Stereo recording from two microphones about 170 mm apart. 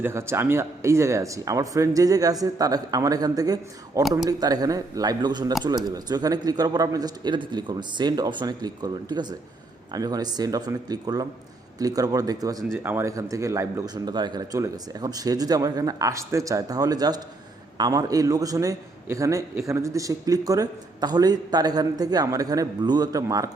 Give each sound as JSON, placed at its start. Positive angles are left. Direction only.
{"t": 0.0, "sound": "a man's voice", "side_deg": -15}